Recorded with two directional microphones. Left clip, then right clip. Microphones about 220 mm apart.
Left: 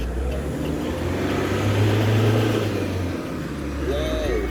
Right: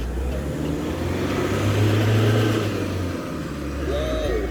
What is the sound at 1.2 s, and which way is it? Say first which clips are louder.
Vehicle: even; 40° right (ahead or behind).